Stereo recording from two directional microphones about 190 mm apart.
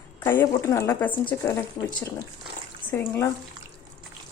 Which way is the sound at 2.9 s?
10° left (ahead or behind).